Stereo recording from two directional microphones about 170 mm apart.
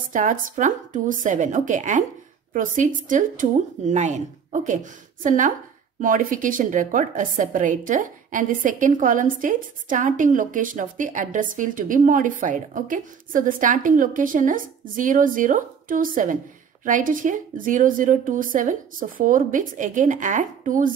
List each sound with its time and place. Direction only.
0.1 s a woman's voice: 50° right (ahead or behind)